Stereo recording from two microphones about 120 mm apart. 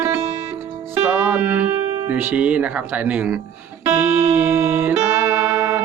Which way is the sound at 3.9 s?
20° right (ahead or behind).